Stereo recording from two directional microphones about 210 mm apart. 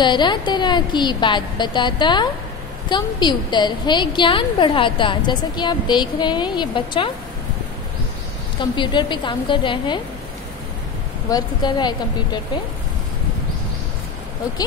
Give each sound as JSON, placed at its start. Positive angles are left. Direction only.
{"t": 0.0, "sound": "a woman's voice", "side_deg": 20}
{"t": 8.5, "sound": "a woman's voice", "side_deg": 20}
{"t": 11.2, "sound": "a woman's voice", "side_deg": 20}